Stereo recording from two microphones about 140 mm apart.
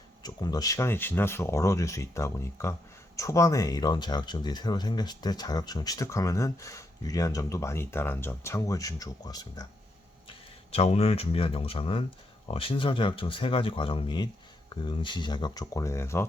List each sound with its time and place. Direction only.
0.2 s speech: 30° left (ahead or behind)
10.2 s speech: 45° left (ahead or behind); by 16.2 s 20° left (ahead or behind)